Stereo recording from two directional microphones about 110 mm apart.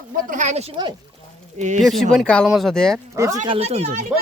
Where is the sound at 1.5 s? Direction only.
90° right.